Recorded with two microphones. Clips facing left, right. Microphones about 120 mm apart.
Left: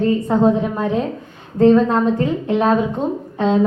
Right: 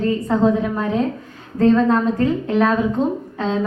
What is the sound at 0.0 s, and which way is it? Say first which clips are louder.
A woman's voice: left 2 dB; 25° left (ahead or behind).